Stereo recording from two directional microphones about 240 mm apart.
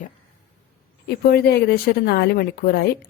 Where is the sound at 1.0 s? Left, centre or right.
Left.